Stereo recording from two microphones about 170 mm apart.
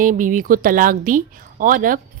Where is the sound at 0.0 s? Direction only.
50° right (ahead or behind).